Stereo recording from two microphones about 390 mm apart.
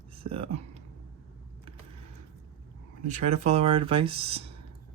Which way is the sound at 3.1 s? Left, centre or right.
Centre.